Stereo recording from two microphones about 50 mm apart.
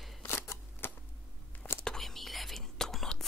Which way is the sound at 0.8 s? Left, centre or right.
Left.